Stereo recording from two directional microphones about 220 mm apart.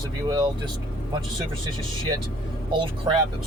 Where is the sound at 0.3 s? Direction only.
20° right (ahead or behind).